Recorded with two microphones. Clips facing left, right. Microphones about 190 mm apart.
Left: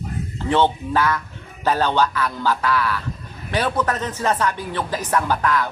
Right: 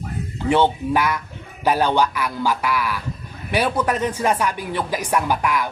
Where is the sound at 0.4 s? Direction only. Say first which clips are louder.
Right 1 dB; 10° right (ahead or behind).